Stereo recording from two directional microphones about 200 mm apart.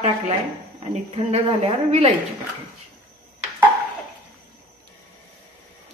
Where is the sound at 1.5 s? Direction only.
30° right (ahead or behind).